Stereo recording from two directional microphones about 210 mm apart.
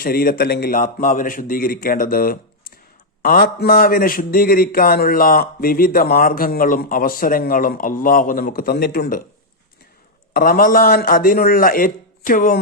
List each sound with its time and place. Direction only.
0.0 s speech: 45° left (ahead or behind)
10.3 s speech: 45° left (ahead or behind)